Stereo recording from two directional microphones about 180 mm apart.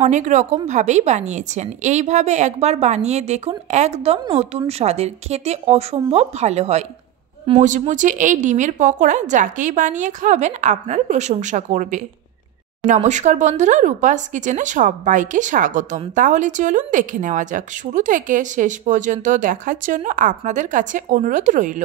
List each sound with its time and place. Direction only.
0.0 s a woman's voice: 40° right (ahead or behind)